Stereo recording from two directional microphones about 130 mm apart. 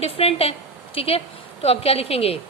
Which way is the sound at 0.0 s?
50° left (ahead or behind).